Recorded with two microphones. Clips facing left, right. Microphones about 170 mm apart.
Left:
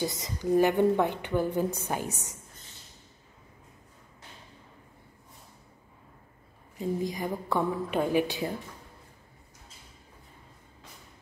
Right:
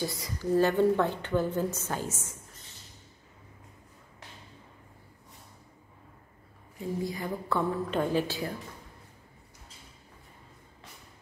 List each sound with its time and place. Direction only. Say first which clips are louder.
0.0 s a woman's voice: left 2 dB; 20° left (ahead or behind)
7.0 s a woman's voice: left 2 dB; 15° left (ahead or behind)